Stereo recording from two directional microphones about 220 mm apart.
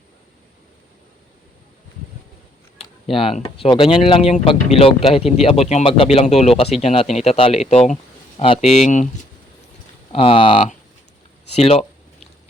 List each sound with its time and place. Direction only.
2.7 s speech: 25° left (ahead or behind)
10.1 s speech: 25° left (ahead or behind)
11.5 s a sound: 30° left (ahead or behind)